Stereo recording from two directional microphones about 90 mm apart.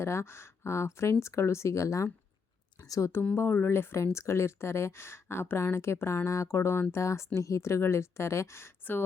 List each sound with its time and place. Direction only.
0.0 s a woman's voice: 30° left (ahead or behind)